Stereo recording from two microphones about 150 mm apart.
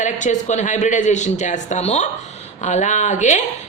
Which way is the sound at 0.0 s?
55° left (ahead or behind).